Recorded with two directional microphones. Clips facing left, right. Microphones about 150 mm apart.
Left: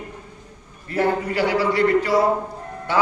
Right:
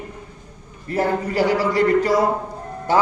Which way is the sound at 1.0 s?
40° right (ahead or behind).